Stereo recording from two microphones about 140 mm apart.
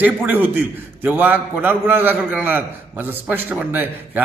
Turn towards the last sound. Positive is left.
turn(degrees=-10)  # may be behind; listen again after turning